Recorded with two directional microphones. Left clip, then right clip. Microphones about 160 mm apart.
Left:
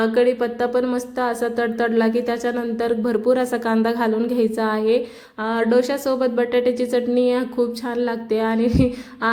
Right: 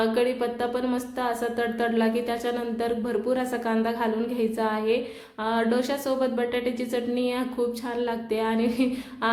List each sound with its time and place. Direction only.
0.0 s speech: 25° left (ahead or behind)